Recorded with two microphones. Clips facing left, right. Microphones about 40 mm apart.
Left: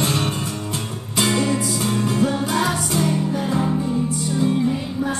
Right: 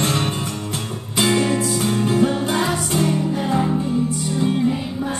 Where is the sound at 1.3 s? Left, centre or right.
Right.